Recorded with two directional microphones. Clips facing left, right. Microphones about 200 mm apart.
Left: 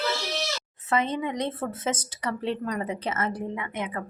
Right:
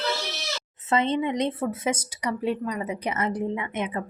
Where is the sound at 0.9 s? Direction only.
25° right (ahead or behind).